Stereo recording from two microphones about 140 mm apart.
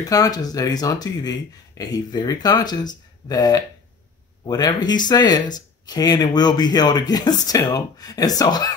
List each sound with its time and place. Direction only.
0.0 s speech: 25° left (ahead or behind)